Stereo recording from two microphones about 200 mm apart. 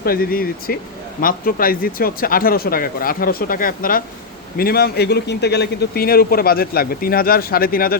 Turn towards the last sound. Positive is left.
turn(degrees=45)  # may be behind; listen again after turning